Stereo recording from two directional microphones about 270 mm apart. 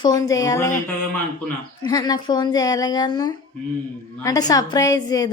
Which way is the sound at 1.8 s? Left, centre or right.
Centre.